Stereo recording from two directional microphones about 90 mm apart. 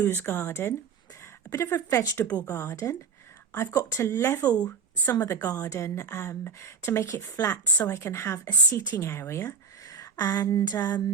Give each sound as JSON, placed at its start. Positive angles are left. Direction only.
{"t": 0.0, "sound": "a woman's voice", "side_deg": 25}
{"t": 4.2, "sound": "a woman's voice", "side_deg": 25}
{"t": 9.9, "sound": "speech", "side_deg": 45}
{"t": 10.8, "sound": "a sound", "side_deg": 45}